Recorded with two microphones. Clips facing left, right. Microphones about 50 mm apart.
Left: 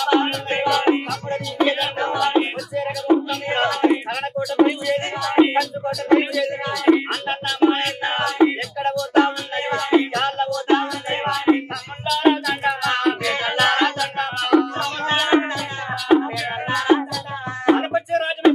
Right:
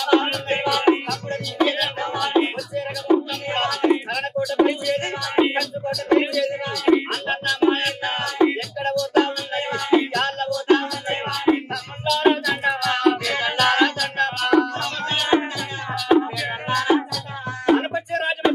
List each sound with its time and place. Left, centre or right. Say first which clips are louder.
0.0 s music: even; centre
2.3 s music: even; centre
15.0 s music: left 3 dB; left
15.9 s music: left 1 dB; centre